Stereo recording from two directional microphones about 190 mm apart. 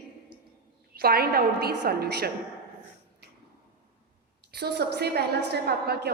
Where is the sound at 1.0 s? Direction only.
55° right (ahead or behind).